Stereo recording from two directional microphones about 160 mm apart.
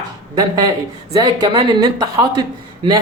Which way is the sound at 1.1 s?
25° right (ahead or behind).